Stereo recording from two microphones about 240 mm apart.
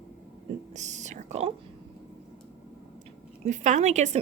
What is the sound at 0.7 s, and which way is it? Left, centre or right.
Whispering, right.